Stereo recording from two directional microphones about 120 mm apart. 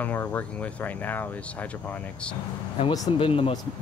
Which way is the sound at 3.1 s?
50° left (ahead or behind).